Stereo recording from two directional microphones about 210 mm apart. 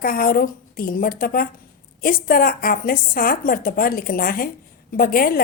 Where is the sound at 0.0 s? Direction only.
45° left (ahead or behind).